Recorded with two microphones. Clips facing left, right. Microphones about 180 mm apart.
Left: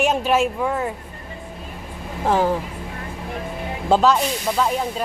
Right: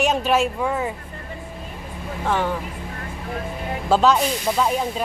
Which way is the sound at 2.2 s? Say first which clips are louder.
Left 4 dB; 35° left (ahead or behind).